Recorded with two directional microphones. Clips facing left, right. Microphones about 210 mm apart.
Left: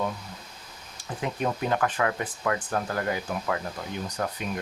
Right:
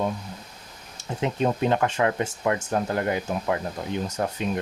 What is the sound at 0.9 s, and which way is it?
Speech, 25° right (ahead or behind).